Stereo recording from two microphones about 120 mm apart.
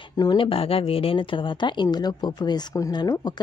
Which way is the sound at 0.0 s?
30° left (ahead or behind).